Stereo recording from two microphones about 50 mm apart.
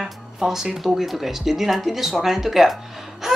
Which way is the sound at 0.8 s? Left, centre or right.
Centre.